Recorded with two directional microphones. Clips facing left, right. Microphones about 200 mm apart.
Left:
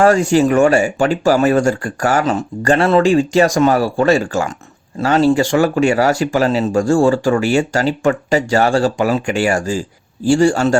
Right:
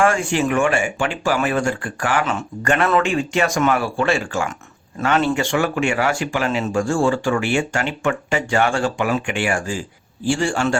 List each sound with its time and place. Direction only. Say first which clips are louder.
0.0 s speech: left 7 dB; 40° left (ahead or behind)